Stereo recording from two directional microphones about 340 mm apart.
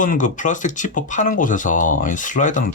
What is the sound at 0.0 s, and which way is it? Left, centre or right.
Speech, left.